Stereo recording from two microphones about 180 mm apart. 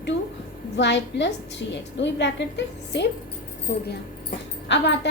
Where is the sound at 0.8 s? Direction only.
75° left (ahead or behind).